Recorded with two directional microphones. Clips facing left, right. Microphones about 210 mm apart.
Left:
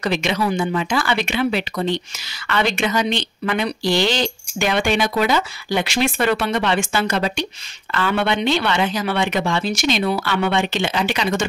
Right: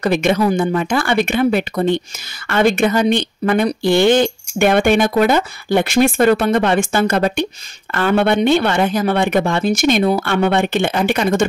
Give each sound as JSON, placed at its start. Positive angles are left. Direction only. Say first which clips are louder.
{"t": 0.0, "sound": "speech", "louder": "right 6 dB", "side_deg": -50}